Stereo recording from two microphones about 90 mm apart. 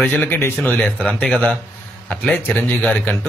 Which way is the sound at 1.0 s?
10° left (ahead or behind).